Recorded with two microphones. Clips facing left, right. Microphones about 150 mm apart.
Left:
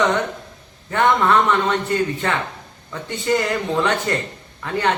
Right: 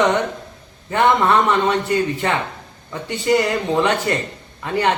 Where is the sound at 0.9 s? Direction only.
10° right (ahead or behind).